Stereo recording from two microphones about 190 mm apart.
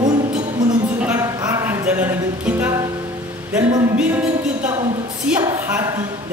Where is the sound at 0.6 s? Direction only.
5° right (ahead or behind).